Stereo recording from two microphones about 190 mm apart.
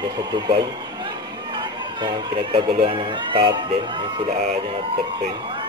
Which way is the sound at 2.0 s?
25° right (ahead or behind).